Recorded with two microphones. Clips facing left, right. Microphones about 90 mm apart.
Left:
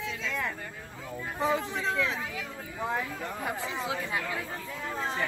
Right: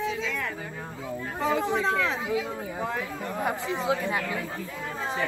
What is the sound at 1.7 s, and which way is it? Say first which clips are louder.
Speech: right 5 dB; 35° right (ahead or behind).